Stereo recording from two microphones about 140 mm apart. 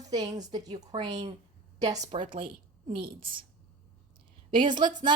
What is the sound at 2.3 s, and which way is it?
Speech, 40° right (ahead or behind).